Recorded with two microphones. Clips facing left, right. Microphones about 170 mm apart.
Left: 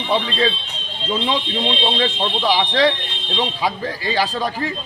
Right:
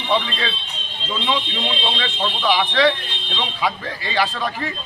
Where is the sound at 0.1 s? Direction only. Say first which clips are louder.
Left 3 dB; 35° left (ahead or behind).